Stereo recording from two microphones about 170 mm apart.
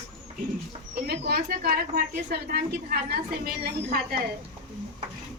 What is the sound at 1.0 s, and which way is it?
A woman's voice, 65° right (ahead or behind).